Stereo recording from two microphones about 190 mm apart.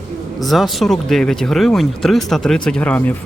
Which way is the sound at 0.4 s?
Centre (ahead or behind).